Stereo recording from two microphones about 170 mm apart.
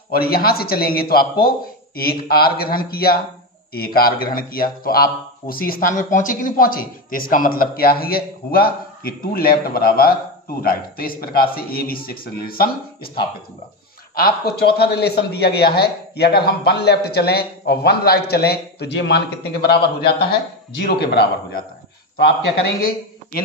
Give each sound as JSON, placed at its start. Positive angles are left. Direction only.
{"t": 0.1, "sound": "speech", "side_deg": 65}
{"t": 14.1, "sound": "a man's voice", "side_deg": 65}
{"t": 22.8, "sound": "speech", "side_deg": 55}